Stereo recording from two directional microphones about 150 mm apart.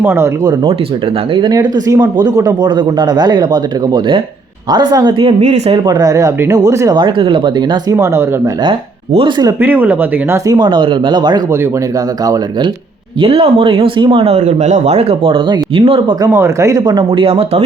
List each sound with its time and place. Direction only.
0.0 s speech: 15° right (ahead or behind)
1.3 s speech: 30° right (ahead or behind)
5.8 s speech: 25° right (ahead or behind)
7.9 s speech: 20° right (ahead or behind)
9.1 s speech: 30° right (ahead or behind)
9.6 s speech: 10° right (ahead or behind)
13.1 s speech: 40° right (ahead or behind)
14.3 s speech: 45° right (ahead or behind)
16.3 s speech: 20° right (ahead or behind); by 17.6 s 40° right (ahead or behind)